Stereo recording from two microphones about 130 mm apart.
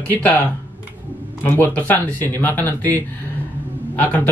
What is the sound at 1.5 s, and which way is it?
Speech, 15° left (ahead or behind).